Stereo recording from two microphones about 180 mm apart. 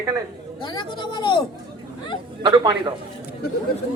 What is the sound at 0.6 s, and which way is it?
Speech, 25° left (ahead or behind).